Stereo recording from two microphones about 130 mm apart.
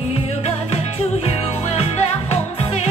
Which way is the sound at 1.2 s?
50° left (ahead or behind).